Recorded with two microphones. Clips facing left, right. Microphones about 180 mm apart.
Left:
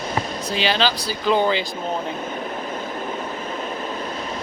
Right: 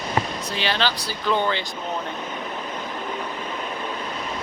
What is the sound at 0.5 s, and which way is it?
Speech, 90° left.